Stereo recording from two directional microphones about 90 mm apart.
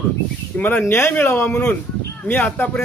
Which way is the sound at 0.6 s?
20° left (ahead or behind).